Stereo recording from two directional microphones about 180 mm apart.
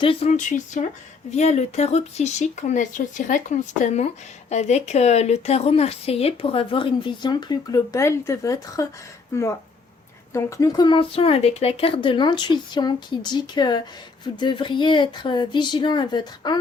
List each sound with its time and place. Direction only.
0.0 s speech: 30° left (ahead or behind)
0.3 s speech: 45° left (ahead or behind); by 16.6 s 25° left (ahead or behind)